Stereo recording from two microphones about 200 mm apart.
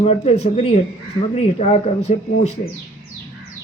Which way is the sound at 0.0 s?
30° left (ahead or behind).